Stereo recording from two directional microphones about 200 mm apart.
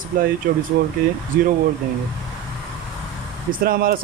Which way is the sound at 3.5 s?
45° right (ahead or behind).